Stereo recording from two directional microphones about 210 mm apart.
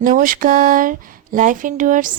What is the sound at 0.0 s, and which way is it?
Speech, 40° right (ahead or behind).